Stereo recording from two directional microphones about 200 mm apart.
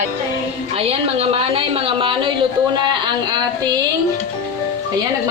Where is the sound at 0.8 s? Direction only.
30° right (ahead or behind).